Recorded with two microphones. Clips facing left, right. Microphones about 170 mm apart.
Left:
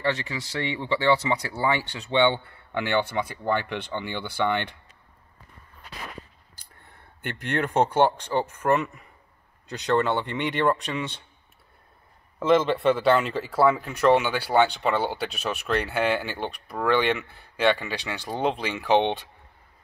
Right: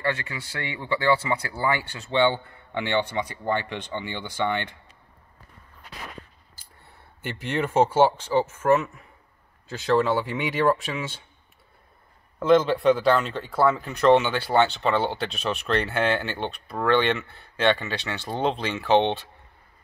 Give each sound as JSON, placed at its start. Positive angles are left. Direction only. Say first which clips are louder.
{"t": 0.0, "sound": "speech", "louder": "left 1 dB", "side_deg": 25}
{"t": 2.7, "sound": "speech", "louder": "left 1 dB", "side_deg": -20}
{"t": 3.4, "sound": "speech", "louder": "left 1 dB", "side_deg": 15}
{"t": 4.1, "sound": "speech", "louder": "left 1 dB", "side_deg": -15}
{"t": 7.6, "sound": "speech", "louder": "right 2 dB", "side_deg": -5}
{"t": 12.4, "sound": "speech", "louder": "right 2 dB", "side_deg": 0}